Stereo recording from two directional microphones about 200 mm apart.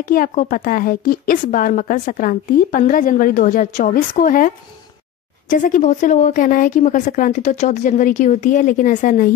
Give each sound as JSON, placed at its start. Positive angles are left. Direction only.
{"t": 0.1, "sound": "a woman's voice", "side_deg": 45}
{"t": 5.5, "sound": "a woman's voice", "side_deg": 40}